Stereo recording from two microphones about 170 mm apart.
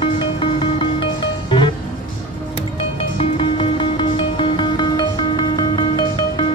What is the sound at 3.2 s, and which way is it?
Music, 30° left (ahead or behind).